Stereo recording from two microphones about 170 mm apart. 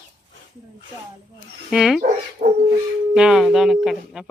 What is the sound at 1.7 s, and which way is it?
Speech, 5° right (ahead or behind).